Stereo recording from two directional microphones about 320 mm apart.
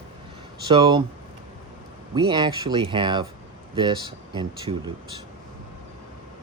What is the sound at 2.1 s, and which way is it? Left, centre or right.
Speech, centre.